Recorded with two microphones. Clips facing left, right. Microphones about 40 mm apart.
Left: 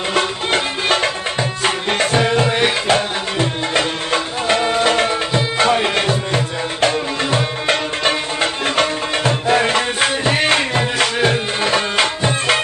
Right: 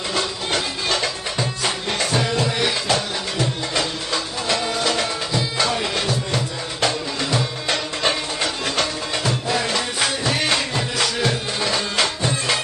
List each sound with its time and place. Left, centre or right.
0.1 s music: left